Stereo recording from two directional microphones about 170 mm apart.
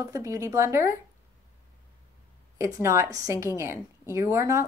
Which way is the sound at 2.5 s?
20° right (ahead or behind).